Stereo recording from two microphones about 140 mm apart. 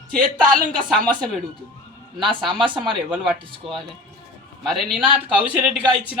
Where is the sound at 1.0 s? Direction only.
5° left (ahead or behind).